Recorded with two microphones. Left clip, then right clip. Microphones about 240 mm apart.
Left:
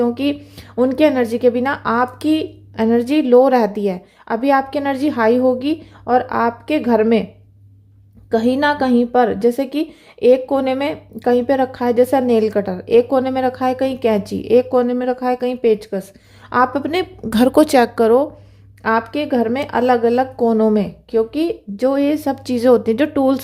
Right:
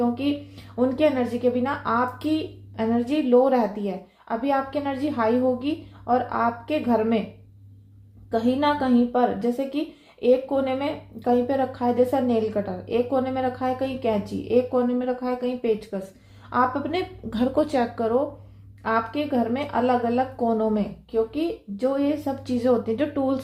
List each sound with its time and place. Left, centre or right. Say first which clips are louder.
0.0 s a woman's voice: left 7 dB; left
8.3 s a woman's voice: left 6 dB; left